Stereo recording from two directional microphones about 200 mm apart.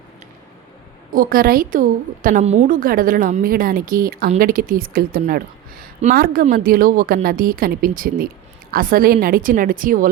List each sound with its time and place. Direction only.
1.1 s a woman's voice: 45° right (ahead or behind)